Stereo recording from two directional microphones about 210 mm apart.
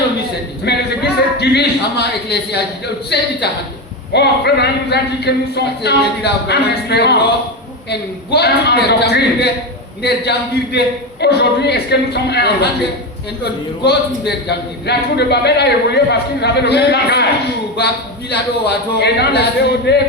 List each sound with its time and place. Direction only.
0.6 s a man's voice: 50° left (ahead or behind)
18.6 s a man's voice: 50° left (ahead or behind)